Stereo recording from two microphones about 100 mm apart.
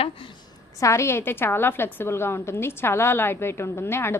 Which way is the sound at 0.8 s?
30° left (ahead or behind).